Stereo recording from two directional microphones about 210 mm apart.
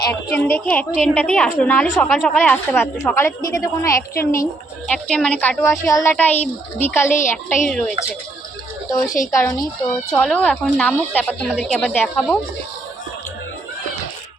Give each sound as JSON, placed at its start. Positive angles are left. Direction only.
{"t": 0.1, "sound": "a woman's voice", "side_deg": 10}
{"t": 9.3, "sound": "a woman's voice", "side_deg": 15}
{"t": 10.2, "sound": "speech", "side_deg": 5}